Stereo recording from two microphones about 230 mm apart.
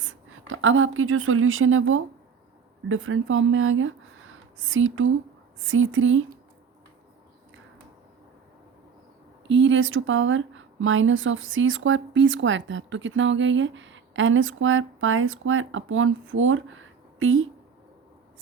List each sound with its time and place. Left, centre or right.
0.0 s a woman's voice: right
9.5 s speech: right